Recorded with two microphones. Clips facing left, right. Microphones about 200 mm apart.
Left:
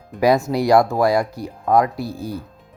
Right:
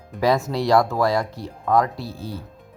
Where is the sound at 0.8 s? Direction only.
15° left (ahead or behind).